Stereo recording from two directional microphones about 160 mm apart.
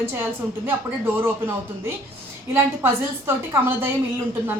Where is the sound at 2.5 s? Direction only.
15° right (ahead or behind).